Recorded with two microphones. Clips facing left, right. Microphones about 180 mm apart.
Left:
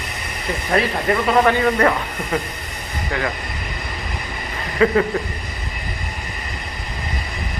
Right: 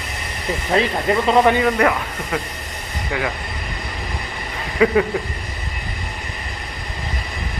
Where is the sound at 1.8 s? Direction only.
5° right (ahead or behind).